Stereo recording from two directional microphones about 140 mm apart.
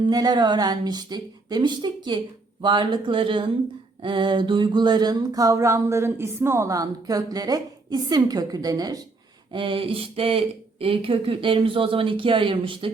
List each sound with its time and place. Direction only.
0.0 s a woman's voice: 30° right (ahead or behind)
4.0 s a sound: 35° right (ahead or behind)
9.5 s a woman's voice: 35° right (ahead or behind)